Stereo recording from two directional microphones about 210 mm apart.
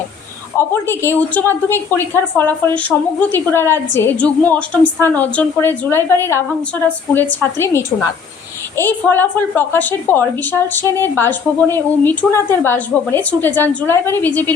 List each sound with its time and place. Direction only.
0.5 s a woman's voice: 10° left (ahead or behind)